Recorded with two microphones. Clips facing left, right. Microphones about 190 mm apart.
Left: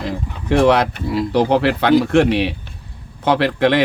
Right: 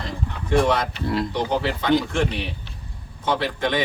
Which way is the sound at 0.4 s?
70° left (ahead or behind).